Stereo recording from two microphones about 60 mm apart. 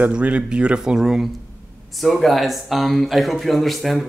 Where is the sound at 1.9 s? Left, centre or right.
Centre.